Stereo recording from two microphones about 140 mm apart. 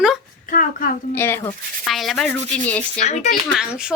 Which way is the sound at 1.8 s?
Centre (ahead or behind).